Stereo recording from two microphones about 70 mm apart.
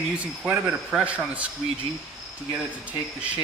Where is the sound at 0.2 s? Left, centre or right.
Centre.